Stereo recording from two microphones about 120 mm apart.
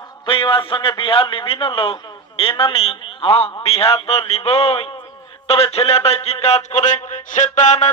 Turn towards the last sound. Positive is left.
turn(degrees=80)